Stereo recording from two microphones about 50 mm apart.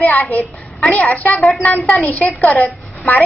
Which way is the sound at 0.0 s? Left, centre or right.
Left.